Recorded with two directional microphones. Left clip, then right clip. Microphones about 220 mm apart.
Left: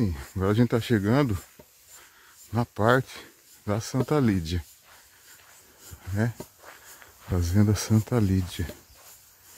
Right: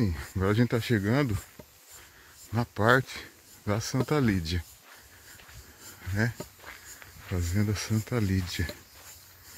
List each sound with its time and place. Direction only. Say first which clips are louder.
0.0 s speech: left 2 dB; 5° left (ahead or behind)
0.7 s speech: left 3 dB; 25° left (ahead or behind)
2.5 s speech: left 1 dB; 10° left (ahead or behind)
6.1 s speech: even; 5° left (ahead or behind)
7.3 s speech: left 6 dB; 20° left (ahead or behind)